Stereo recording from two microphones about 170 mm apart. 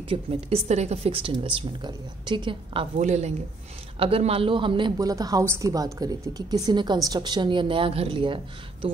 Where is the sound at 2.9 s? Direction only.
40° right (ahead or behind).